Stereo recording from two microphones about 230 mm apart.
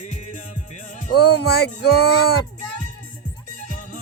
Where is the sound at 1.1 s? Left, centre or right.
Left.